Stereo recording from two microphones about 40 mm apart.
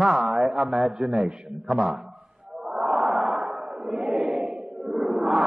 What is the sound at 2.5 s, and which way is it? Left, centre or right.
Chant, centre.